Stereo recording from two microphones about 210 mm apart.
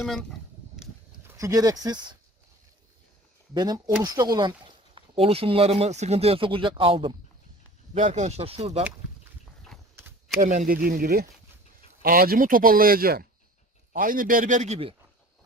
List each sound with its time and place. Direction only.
0.0 s speech: centre (ahead or behind)
1.3 s speech: 15° right (ahead or behind)
3.5 s a man's voice: 20° right (ahead or behind)
10.4 s a man's voice: 35° right (ahead or behind)